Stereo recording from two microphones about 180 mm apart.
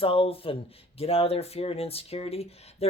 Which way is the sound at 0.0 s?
30° left (ahead or behind).